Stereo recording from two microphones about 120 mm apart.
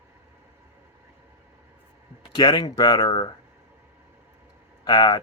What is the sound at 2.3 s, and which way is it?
Speech, 40° left (ahead or behind).